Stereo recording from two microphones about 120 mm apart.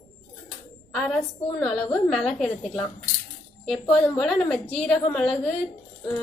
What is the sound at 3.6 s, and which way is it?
A woman's voice, centre (ahead or behind).